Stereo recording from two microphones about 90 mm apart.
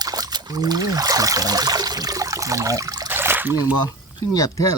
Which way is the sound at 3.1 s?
25° right (ahead or behind).